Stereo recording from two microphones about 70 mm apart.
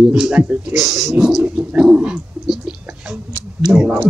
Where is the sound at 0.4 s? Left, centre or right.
Right.